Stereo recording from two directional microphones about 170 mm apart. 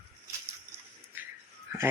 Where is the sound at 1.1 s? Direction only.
10° right (ahead or behind).